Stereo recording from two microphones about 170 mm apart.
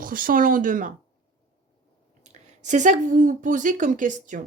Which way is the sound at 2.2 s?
45° right (ahead or behind).